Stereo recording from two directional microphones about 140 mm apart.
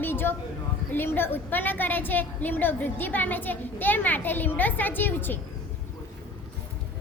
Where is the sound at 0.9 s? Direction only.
15° left (ahead or behind).